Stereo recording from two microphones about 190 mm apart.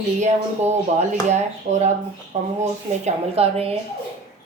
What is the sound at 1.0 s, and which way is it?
A woman's voice, 35° right (ahead or behind).